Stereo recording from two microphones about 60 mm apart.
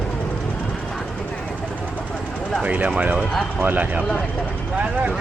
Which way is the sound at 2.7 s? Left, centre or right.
Right.